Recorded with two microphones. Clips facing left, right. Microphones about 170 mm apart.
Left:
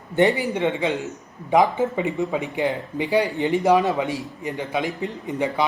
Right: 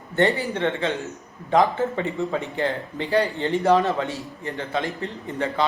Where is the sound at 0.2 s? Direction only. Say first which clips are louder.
Left 2 dB; 15° left (ahead or behind).